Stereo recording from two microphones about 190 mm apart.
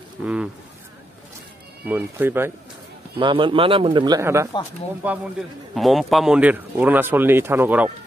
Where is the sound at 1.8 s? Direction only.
10° right (ahead or behind).